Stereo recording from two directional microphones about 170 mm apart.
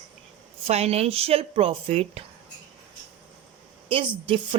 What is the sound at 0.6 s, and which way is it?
Speech, 40° right (ahead or behind).